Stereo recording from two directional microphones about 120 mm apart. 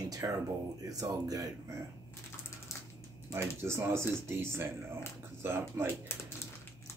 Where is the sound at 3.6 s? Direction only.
20° right (ahead or behind).